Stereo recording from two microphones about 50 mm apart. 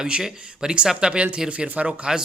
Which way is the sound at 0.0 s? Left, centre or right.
Centre.